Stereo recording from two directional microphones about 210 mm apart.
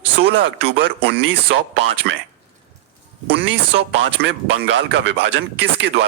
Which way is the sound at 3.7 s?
55° right (ahead or behind).